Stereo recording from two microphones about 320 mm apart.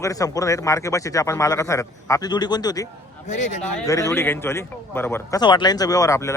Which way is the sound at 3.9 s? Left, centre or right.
Centre.